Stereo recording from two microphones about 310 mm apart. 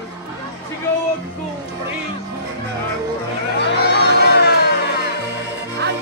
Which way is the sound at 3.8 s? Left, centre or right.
Left.